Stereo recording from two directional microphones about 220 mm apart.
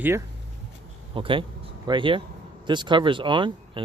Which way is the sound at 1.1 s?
25° right (ahead or behind).